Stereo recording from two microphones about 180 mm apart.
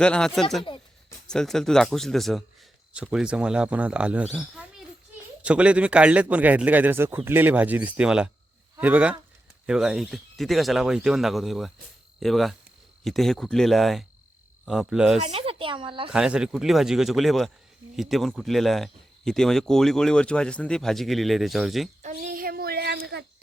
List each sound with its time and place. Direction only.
0.0 s speech: 5° left (ahead or behind)
15.2 s speech: 35° right (ahead or behind)
16.1 s speech: 5° right (ahead or behind)
22.0 s a sound: 45° right (ahead or behind); by 23.0 s 65° right (ahead or behind)